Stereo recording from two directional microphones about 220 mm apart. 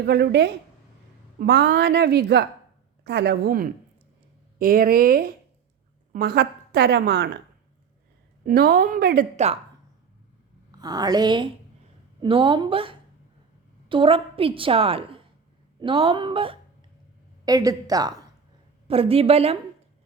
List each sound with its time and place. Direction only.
0.0 s a woman's voice: 50° right (ahead or behind)
8.4 s speech: 40° right (ahead or behind)
9.3 s a woman's voice: 30° right (ahead or behind)
10.7 s a woman's voice: 15° right (ahead or behind)